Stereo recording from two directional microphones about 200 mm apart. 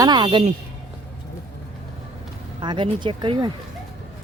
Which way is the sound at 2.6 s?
25° right (ahead or behind).